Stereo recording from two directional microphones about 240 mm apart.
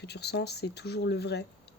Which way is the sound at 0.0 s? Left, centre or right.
Left.